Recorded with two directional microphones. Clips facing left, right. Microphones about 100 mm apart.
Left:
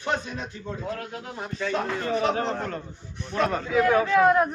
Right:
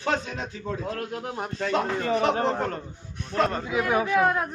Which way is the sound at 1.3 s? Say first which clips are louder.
Right 1 dB; 55° right (ahead or behind).